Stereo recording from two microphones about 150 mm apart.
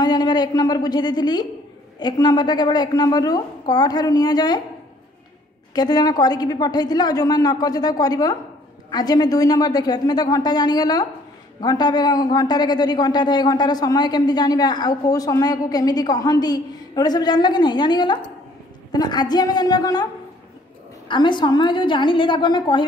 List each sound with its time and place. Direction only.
0.0 s a man's voice: 25° left (ahead or behind)
5.8 s a man's voice: 25° left (ahead or behind)
21.1 s a woman's voice: 30° left (ahead or behind)